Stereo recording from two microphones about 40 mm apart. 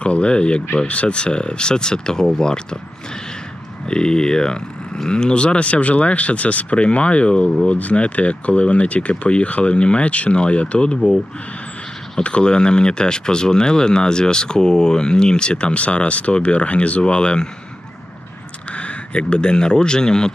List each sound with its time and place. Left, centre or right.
0.0 s speech: left
3.8 s speech: left
12.2 s speech: left
18.7 s speech: left